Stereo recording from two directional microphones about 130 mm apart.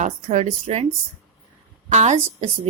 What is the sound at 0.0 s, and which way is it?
Speech, 70° right (ahead or behind).